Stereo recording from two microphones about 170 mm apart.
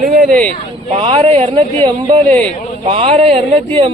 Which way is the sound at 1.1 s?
40° right (ahead or behind).